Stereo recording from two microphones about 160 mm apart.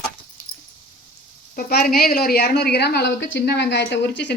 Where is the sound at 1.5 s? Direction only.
65° left (ahead or behind).